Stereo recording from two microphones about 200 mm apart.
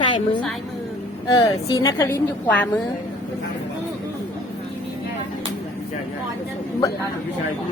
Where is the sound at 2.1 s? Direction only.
5° left (ahead or behind).